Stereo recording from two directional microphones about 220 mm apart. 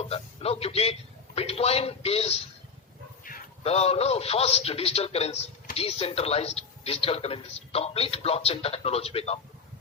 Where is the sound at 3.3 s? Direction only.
40° left (ahead or behind).